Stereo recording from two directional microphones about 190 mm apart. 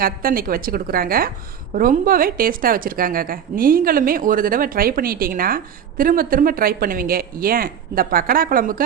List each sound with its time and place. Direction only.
0.0 s a woman's voice: 50° right (ahead or behind)